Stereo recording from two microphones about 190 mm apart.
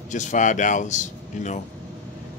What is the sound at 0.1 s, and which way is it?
Speech, 40° left (ahead or behind).